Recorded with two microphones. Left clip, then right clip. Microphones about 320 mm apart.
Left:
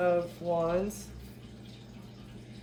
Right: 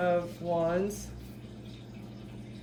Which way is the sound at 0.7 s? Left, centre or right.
Centre.